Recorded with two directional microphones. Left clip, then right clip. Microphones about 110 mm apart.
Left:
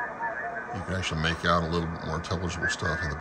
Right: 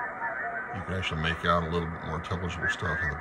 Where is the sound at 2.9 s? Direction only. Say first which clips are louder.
Even; 80° left.